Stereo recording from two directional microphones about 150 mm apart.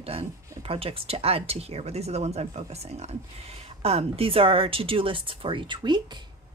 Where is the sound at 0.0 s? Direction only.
40° right (ahead or behind).